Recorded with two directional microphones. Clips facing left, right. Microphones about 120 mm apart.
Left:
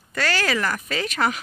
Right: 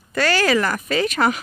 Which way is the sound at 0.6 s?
45° right (ahead or behind).